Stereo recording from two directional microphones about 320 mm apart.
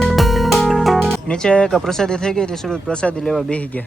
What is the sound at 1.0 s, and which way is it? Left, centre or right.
Music, left.